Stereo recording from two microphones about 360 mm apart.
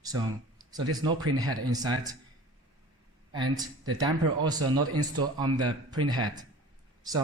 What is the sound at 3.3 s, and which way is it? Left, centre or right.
Speech, centre.